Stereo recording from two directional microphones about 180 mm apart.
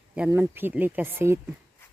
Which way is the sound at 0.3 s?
10° right (ahead or behind).